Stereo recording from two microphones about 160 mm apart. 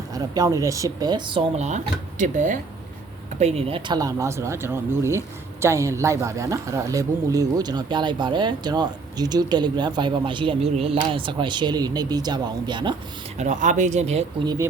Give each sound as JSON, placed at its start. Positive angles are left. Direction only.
{"t": 0.1, "sound": "speech", "side_deg": -25}
{"t": 13.4, "sound": "speech", "side_deg": -50}